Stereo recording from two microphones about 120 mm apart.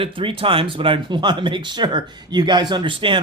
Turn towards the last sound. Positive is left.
turn(degrees=-45)  # may be behind; listen again after turning